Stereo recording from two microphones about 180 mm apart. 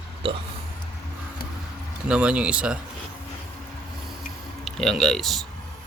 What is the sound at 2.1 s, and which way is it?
Speech, 5° right (ahead or behind).